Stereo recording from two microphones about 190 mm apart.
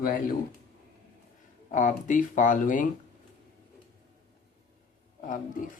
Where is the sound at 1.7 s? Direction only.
45° left (ahead or behind).